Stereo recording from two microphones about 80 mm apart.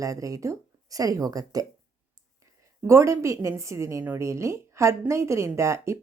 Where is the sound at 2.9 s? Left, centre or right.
Right.